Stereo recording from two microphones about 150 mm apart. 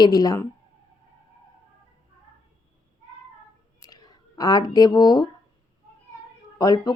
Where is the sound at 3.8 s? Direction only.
25° left (ahead or behind).